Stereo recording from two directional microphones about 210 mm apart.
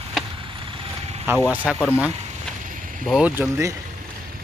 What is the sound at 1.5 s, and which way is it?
Speech, 5° right (ahead or behind).